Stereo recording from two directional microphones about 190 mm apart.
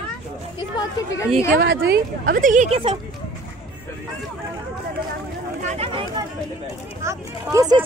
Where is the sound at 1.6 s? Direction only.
60° right (ahead or behind); by 2.8 s 40° right (ahead or behind).